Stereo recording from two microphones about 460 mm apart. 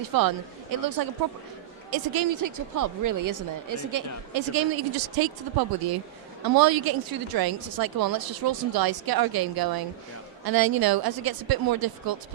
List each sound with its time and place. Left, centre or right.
0.1 s speech: right